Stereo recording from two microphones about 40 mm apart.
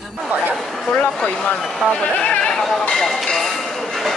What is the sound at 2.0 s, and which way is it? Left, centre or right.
Speech, left.